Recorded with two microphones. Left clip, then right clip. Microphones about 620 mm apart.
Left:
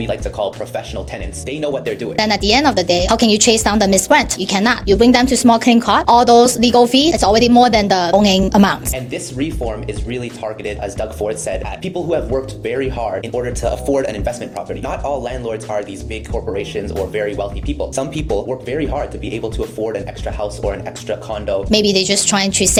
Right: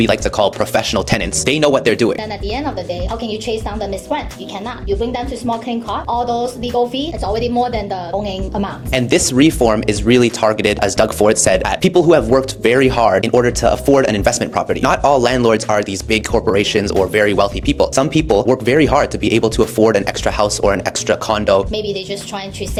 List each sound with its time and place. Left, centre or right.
0.0 s speech: right
2.1 s a woman's voice: centre
9.1 s speech: right
21.7 s a woman's voice: centre